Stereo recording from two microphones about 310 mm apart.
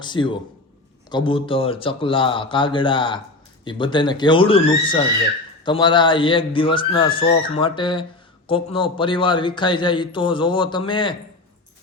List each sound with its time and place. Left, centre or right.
0.0 s a man's voice: centre